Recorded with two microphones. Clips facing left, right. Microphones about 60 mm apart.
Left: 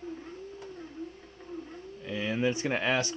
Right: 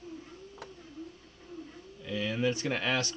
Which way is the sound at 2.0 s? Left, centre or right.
Left.